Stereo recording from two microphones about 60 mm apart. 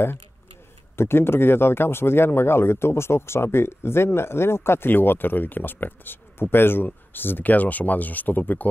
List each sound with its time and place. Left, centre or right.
0.9 s speech: left